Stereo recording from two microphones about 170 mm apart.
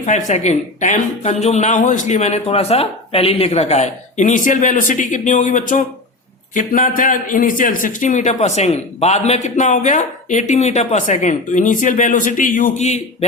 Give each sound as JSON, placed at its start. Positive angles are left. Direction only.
{"t": 0.0, "sound": "a man's voice", "side_deg": 45}